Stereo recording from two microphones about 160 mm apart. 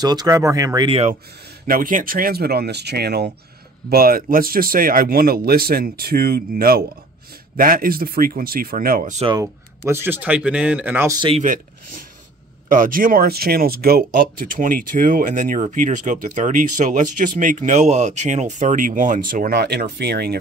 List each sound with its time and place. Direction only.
0.0 s speech: 25° right (ahead or behind)
0.8 s speech: 40° right (ahead or behind)
1.7 s speech: 60° right (ahead or behind); by 3.3 s 90° right
3.9 s speech: 70° right (ahead or behind)
9.4 s speech: 15° right (ahead or behind)
11.1 s speech: 35° right (ahead or behind)
11.4 s speech: 55° right (ahead or behind); by 20.3 s 90° right